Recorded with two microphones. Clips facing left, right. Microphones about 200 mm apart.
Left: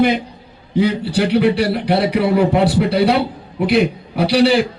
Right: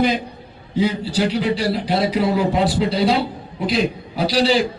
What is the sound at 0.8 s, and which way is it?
A man's voice, 60° left (ahead or behind).